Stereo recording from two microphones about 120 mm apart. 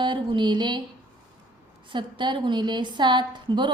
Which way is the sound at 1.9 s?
40° right (ahead or behind).